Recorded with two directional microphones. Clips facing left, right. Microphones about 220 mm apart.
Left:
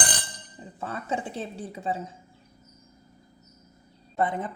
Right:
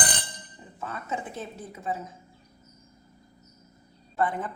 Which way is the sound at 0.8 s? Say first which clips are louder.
Left 3 dB; 30° left (ahead or behind).